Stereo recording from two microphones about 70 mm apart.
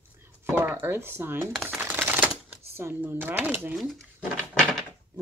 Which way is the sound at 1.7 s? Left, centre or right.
Right.